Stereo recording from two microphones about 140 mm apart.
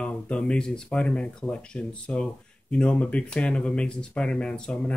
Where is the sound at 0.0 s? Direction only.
10° left (ahead or behind).